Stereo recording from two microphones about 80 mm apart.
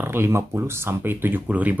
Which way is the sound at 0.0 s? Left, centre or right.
Right.